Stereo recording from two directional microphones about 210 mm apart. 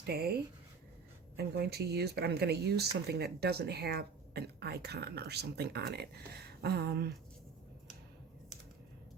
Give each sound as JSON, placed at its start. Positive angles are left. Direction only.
{"t": 0.0, "sound": "speech", "side_deg": -50}